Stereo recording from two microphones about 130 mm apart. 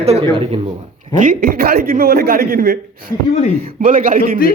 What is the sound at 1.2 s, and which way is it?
Speech, 90° right.